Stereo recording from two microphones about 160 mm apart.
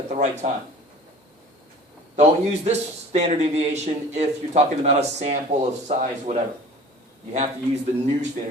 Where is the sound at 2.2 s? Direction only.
45° right (ahead or behind).